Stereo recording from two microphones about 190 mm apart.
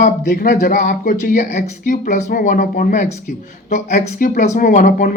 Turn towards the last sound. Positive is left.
turn(degrees=45)  # may be behind; listen again after turning